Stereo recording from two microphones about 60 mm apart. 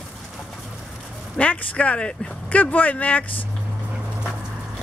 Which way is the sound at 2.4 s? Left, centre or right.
Left.